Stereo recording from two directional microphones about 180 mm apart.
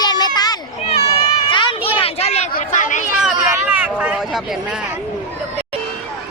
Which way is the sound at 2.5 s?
45° left (ahead or behind).